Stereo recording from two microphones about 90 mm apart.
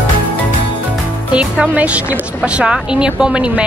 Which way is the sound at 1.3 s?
15° right (ahead or behind).